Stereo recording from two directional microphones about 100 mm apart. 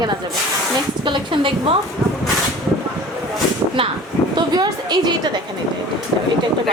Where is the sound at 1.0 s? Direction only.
55° right (ahead or behind).